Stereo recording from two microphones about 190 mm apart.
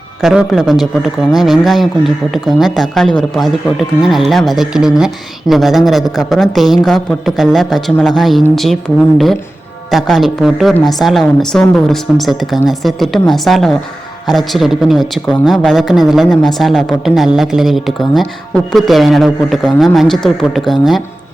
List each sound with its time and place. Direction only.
0.2 s a man's voice: centre (ahead or behind)